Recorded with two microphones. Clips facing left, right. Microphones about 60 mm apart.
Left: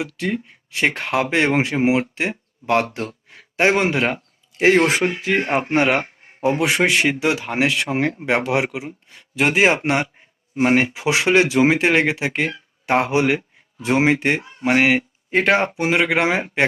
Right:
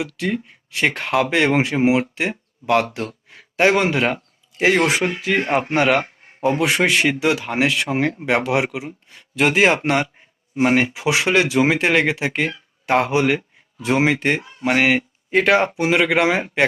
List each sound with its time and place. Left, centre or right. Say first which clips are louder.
0.0 s speech: right 1 dB; left
9.3 s speech: right 1 dB; centre
9.8 s speech: right 1 dB; left
15.3 s speech: right 1 dB; left